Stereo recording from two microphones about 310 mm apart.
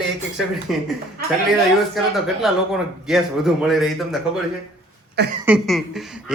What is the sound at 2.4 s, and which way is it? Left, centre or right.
Speech, centre.